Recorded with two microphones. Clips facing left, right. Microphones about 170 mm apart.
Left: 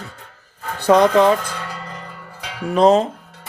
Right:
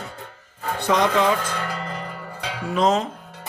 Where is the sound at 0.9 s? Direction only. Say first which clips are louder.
Left 7 dB; 35° left (ahead or behind).